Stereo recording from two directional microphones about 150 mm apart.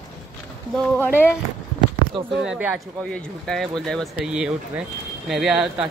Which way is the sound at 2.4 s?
5° right (ahead or behind).